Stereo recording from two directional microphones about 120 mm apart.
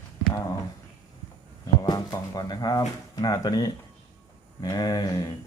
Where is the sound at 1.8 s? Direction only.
35° left (ahead or behind).